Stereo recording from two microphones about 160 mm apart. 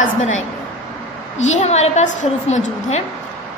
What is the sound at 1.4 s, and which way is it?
A woman's voice, 45° left (ahead or behind).